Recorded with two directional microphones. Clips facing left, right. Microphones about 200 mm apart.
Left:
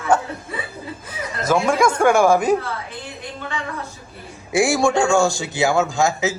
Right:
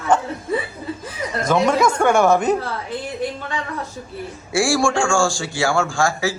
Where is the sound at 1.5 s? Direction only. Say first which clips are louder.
Even; 10° left (ahead or behind).